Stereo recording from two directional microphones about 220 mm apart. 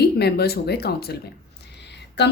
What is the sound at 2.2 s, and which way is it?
Speech, 50° left (ahead or behind).